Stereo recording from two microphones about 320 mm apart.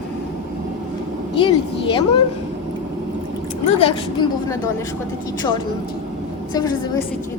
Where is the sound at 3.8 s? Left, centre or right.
Centre.